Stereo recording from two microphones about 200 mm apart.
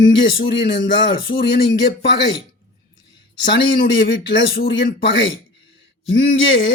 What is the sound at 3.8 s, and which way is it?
Speech, 65° left (ahead or behind).